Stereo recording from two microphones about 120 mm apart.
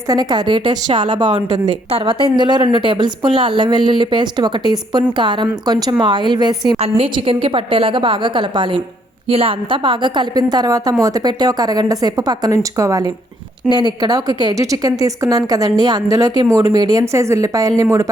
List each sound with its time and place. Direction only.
0.1 s a woman's voice: 35° right (ahead or behind)
6.7 s a woman's voice: 55° right (ahead or behind); by 13.1 s 25° right (ahead or behind)
13.6 s speech: 5° right (ahead or behind)
14.0 s a woman's voice: 35° right (ahead or behind)